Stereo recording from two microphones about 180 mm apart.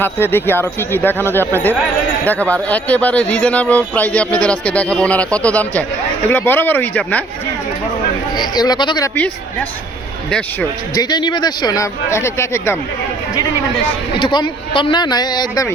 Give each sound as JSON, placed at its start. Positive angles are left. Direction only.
{"t": 0.0, "sound": "speech", "side_deg": 10}
{"t": 8.4, "sound": "speech", "side_deg": 20}
{"t": 9.1, "sound": "a man's voice", "side_deg": 10}
{"t": 10.9, "sound": "speech", "side_deg": 25}
{"t": 14.2, "sound": "speech", "side_deg": 25}